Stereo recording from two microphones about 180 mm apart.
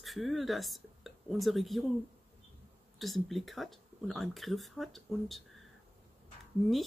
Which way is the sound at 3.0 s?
Centre (ahead or behind).